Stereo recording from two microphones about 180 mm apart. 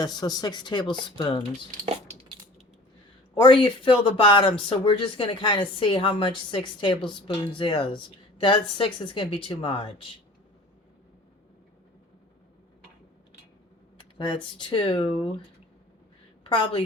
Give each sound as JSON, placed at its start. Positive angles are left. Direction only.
{"t": 0.0, "sound": "speech", "side_deg": 20}
{"t": 3.4, "sound": "speech", "side_deg": 30}
{"t": 14.2, "sound": "speech", "side_deg": 25}
{"t": 16.5, "sound": "speech", "side_deg": 25}